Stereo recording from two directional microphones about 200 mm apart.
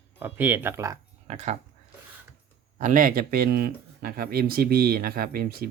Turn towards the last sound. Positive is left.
turn(degrees=-50)  # may be behind; listen again after turning